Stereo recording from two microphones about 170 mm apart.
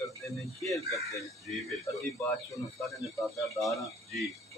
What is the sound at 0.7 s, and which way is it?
Speech, 20° left (ahead or behind).